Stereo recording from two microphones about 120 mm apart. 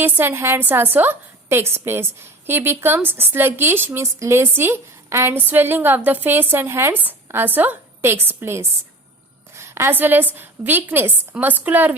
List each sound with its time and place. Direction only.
0.0 s a woman's voice: 20° right (ahead or behind)